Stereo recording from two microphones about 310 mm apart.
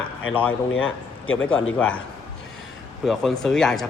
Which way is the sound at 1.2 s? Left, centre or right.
Left.